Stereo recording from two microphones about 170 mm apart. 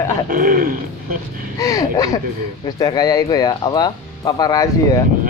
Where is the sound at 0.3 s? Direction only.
55° right (ahead or behind).